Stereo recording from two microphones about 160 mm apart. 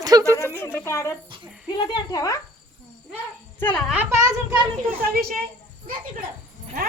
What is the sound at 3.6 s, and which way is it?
Speech, 10° left (ahead or behind).